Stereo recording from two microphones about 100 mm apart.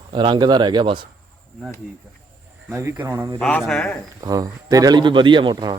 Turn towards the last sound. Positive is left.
turn(degrees=-45)  # may be behind; listen again after turning